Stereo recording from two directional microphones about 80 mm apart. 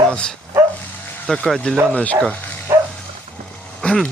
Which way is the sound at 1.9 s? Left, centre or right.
Centre.